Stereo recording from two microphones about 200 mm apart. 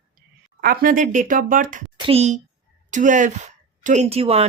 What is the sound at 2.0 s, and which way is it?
A woman's voice, 30° right (ahead or behind).